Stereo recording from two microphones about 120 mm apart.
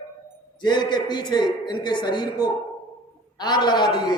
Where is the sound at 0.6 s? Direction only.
40° left (ahead or behind).